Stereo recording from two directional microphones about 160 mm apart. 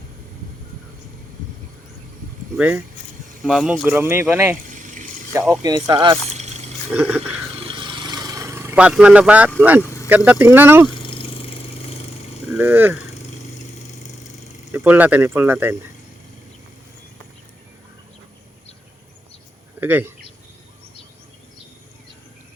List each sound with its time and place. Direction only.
2.6 s speech: 10° right (ahead or behind); by 6.1 s 30° right (ahead or behind)
6.2 s vehicle: 45° right (ahead or behind)
6.9 s speech: 10° right (ahead or behind)
7.6 s a sound: 30° right (ahead or behind); by 9.5 s 10° right (ahead or behind)
9.6 s speech: 10° right (ahead or behind)
10.8 s vehicle: 30° left (ahead or behind)
12.5 s speech: 10° right (ahead or behind)
14.7 s speech: 10° right (ahead or behind)
19.8 s speech: 15° right (ahead or behind)